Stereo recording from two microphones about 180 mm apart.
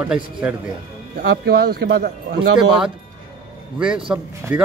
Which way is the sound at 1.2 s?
60° right (ahead or behind).